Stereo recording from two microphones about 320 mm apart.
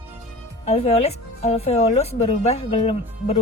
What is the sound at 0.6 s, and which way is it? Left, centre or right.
Speech, centre.